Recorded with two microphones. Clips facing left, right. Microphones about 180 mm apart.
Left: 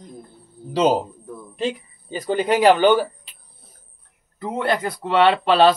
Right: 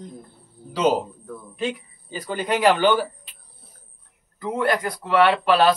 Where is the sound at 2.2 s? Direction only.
30° left (ahead or behind).